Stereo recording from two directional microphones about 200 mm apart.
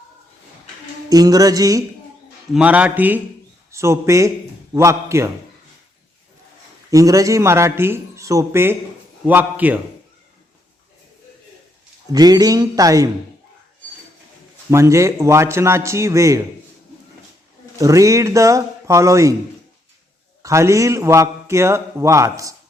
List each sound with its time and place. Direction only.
1.1 s a man's voice: 20° right (ahead or behind)
2.5 s a man's voice: 5° right (ahead or behind)
6.9 s a man's voice: 15° right (ahead or behind)
12.1 s a man's voice: 20° right (ahead or behind)
14.7 s a man's voice: 15° right (ahead or behind)
17.7 s a man's voice: 15° right (ahead or behind)
20.4 s a man's voice: 15° right (ahead or behind)